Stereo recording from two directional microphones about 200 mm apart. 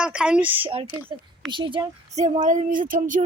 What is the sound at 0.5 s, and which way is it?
Speech, 25° right (ahead or behind).